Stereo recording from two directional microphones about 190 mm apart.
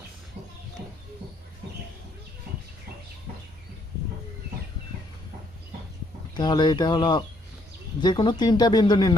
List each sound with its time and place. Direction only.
6.3 s speech: 25° left (ahead or behind)